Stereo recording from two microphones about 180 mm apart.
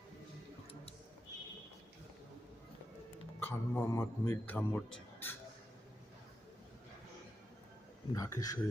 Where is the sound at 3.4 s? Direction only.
15° left (ahead or behind).